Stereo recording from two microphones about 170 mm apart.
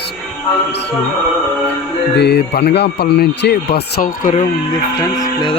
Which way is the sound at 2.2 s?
75° left (ahead or behind).